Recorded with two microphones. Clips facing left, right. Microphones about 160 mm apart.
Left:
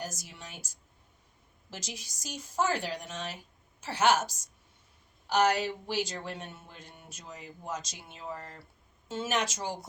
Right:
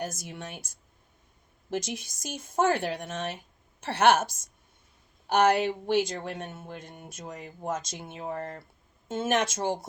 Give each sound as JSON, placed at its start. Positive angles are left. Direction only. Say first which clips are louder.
{"t": 0.0, "sound": "a woman's voice", "louder": "right 6 dB", "side_deg": -55}